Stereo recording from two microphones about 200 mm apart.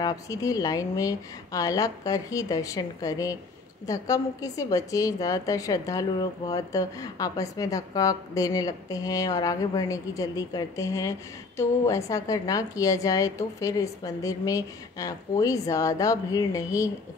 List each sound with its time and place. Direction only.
0.0 s a woman's voice: 15° left (ahead or behind)